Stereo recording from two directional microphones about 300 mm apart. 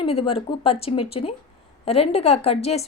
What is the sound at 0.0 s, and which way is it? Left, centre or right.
A woman's voice, centre.